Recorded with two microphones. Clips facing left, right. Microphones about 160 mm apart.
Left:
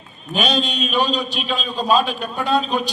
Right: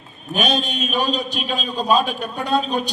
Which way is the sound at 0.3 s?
50° right (ahead or behind).